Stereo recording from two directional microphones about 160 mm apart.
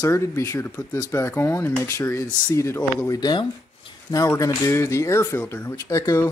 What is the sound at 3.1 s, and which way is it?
Speech, 30° left (ahead or behind).